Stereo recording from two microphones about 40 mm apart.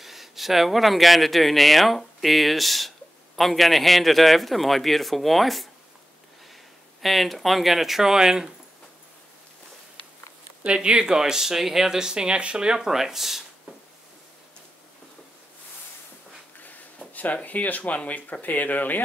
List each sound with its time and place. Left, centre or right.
0.0 s a man's voice: centre
7.0 s a man's voice: centre
10.6 s speech: right; by 13.7 s centre
16.5 s a sound: left
17.1 s speech: left